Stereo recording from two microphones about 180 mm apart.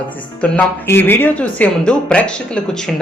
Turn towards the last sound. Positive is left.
turn(degrees=5)  # may be behind; listen again after turning